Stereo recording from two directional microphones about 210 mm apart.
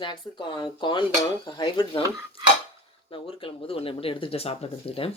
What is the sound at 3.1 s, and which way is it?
Speech, 25° left (ahead or behind).